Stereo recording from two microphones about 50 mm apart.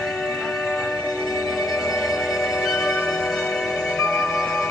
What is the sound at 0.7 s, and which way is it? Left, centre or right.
Music, left.